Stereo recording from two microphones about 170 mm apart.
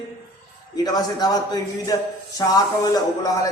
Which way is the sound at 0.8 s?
20° left (ahead or behind).